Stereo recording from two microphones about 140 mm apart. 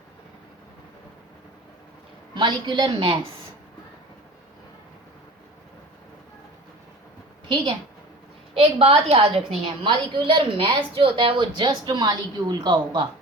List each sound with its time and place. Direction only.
2.3 s a woman's voice: 35° right (ahead or behind)
8.5 s a woman's voice: 45° right (ahead or behind)